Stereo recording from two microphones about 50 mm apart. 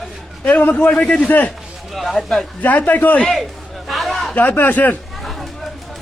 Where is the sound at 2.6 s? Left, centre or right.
Left.